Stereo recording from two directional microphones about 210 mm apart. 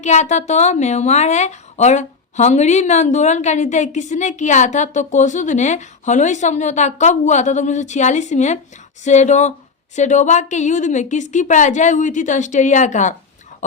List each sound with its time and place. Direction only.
0.0 s a woman's voice: 35° left (ahead or behind)